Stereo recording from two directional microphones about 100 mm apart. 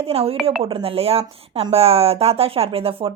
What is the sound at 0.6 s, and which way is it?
Speech, 70° right (ahead or behind).